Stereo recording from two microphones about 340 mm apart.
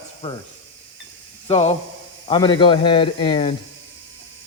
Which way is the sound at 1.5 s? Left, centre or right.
Centre.